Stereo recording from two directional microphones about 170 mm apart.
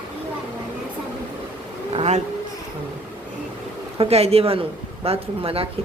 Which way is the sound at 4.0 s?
35° right (ahead or behind).